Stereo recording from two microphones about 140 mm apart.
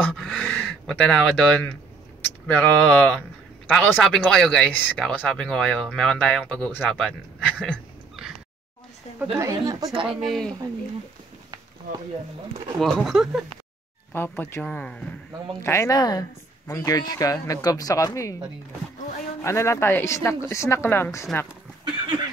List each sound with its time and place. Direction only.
0.0 s a sound: centre (ahead or behind)
2.4 s speech: 10° left (ahead or behind)
9.2 s a woman's voice: 20° right (ahead or behind)
10.0 s speech: centre (ahead or behind)
12.7 s speech: centre (ahead or behind)
14.1 s speech: 15° left (ahead or behind)
15.6 s a woman's voice: 20° left (ahead or behind)
19.4 s a woman's voice: 20° left (ahead or behind)